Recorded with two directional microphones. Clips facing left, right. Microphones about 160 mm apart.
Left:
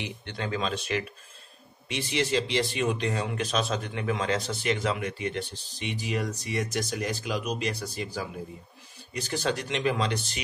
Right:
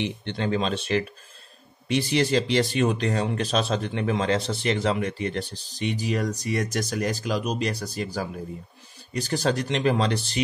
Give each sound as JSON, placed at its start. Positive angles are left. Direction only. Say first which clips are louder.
{"t": 0.0, "sound": "speech", "louder": "right 7 dB", "side_deg": -25}